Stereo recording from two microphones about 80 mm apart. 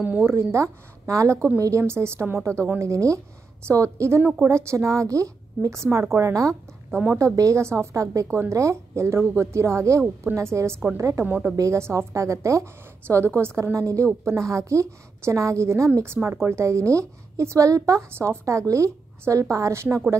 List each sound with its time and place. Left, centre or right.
0.0 s a woman's voice: centre
0.3 s speech: right
11.2 s a woman's voice: right
11.5 s speech: right
15.9 s speech: right
18.1 s speech: right